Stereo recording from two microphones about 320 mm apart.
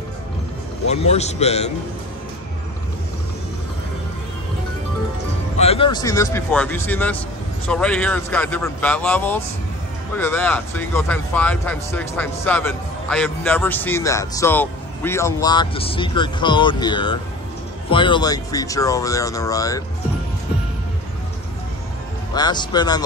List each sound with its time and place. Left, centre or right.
0.8 s a man's voice: centre
5.6 s speech: centre
22.3 s speech: centre